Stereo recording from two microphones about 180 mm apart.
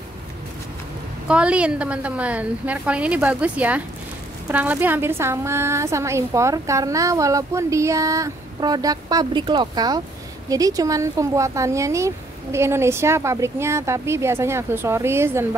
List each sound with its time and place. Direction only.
1.2 s a woman's voice: 5° right (ahead or behind)